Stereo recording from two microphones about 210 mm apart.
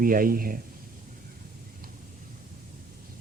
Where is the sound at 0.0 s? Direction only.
40° right (ahead or behind).